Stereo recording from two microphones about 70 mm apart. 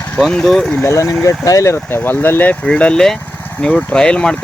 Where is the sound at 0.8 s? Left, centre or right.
Left.